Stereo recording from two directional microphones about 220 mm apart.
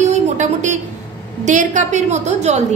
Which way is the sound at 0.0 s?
30° right (ahead or behind).